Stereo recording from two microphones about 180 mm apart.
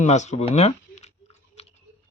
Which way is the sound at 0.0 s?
40° left (ahead or behind).